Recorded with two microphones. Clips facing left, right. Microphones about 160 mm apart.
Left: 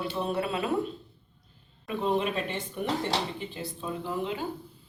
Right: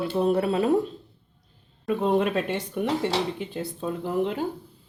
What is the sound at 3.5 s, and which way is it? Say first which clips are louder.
Speech: right 5 dB; 50° right (ahead or behind).